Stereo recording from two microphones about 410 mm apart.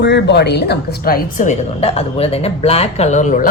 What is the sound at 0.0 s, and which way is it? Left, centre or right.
A woman's voice, left.